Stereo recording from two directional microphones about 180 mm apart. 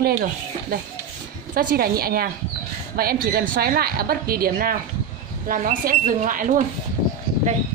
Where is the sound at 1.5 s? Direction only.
55° right (ahead or behind).